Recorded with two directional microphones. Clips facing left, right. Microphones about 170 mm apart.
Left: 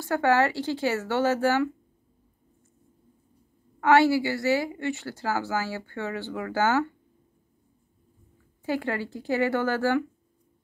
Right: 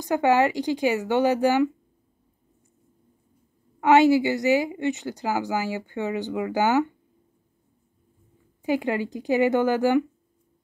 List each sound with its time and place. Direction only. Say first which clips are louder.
0.0 s a woman's voice: right 2 dB; 15° right (ahead or behind)
3.8 s a woman's voice: right 3 dB; 20° right (ahead or behind)
8.6 s a woman's voice: right 4 dB; 15° right (ahead or behind)